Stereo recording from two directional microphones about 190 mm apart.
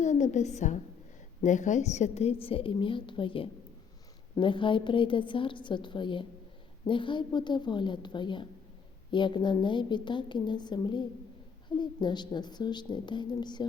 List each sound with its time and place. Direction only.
0.0 s a woman's voice: 40° left (ahead or behind); by 13.7 s 20° left (ahead or behind)